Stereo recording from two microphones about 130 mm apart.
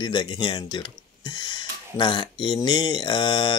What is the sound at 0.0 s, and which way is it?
Speech, 35° left (ahead or behind).